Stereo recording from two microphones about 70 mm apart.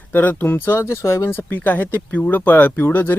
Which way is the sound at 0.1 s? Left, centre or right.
Left.